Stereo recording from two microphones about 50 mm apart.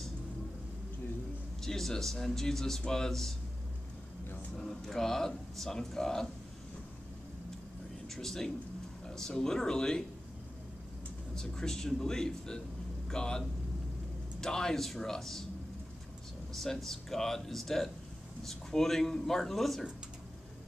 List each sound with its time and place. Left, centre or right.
1.6 s speech: centre
4.6 s speech: centre
8.1 s speech: centre
11.3 s speech: centre
16.5 s speech: centre